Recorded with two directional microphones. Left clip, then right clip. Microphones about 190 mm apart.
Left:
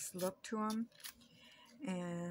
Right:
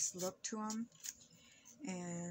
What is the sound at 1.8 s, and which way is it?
Speech, 15° left (ahead or behind).